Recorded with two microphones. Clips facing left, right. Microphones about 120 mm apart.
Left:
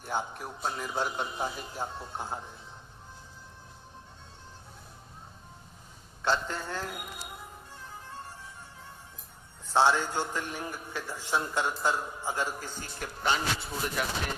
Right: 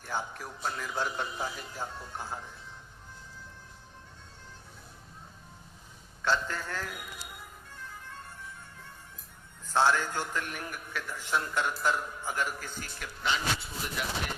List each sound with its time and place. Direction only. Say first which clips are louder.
0.0 s a man's voice: left 2 dB; 20° left (ahead or behind)
6.2 s music: left 1 dB; 20° left (ahead or behind)
9.6 s a man's voice: left 2 dB; 25° left (ahead or behind)
13.2 s speech: left 2 dB; 45° left (ahead or behind)